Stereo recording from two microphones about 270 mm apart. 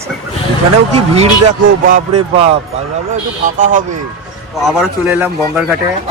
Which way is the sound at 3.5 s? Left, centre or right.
Right.